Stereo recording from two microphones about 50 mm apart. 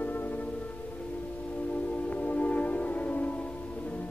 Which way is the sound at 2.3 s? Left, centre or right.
Left.